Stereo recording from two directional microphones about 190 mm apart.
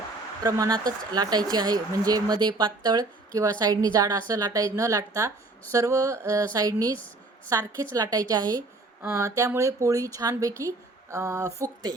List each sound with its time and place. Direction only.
0.4 s a woman's voice: 20° right (ahead or behind)